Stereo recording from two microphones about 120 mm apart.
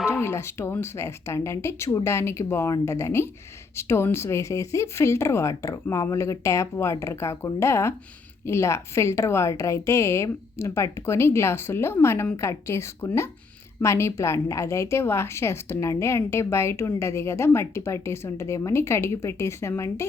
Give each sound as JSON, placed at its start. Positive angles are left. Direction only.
{"t": 0.2, "sound": "a woman's voice", "side_deg": 20}